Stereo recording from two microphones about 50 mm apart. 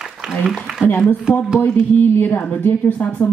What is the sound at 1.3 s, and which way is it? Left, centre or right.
Speech, left.